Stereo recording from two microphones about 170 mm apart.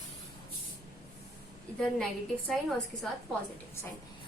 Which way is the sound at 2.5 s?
Centre (ahead or behind).